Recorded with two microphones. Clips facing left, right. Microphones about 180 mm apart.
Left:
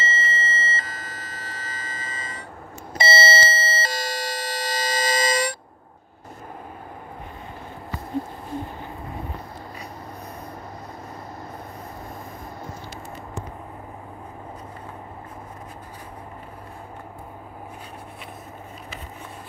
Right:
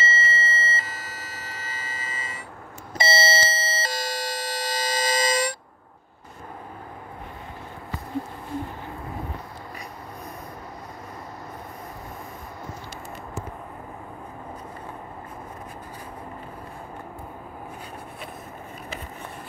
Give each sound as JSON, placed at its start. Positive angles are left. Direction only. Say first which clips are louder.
{"t": 0.0, "sound": "siren", "louder": "right 1 dB", "side_deg": -5}
{"t": 3.0, "sound": "doorbell", "louder": "left 2 dB", "side_deg": 65}